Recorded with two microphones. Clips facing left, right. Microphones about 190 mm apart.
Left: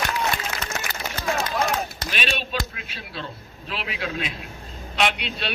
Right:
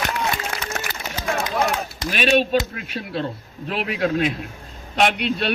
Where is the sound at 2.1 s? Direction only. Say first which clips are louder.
Right 13 dB; 45° right (ahead or behind).